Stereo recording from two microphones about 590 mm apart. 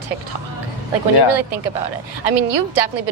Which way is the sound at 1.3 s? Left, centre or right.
Right.